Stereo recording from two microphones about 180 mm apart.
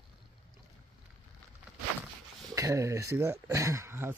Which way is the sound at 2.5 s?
15° right (ahead or behind).